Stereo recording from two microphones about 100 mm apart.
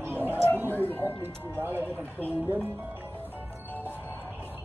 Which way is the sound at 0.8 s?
20° left (ahead or behind).